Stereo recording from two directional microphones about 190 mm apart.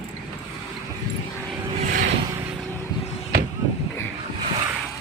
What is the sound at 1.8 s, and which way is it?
Vehicle, 45° right (ahead or behind).